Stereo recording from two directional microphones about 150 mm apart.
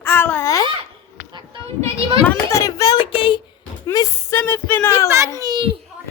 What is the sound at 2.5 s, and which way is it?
Child singing, 20° left (ahead or behind).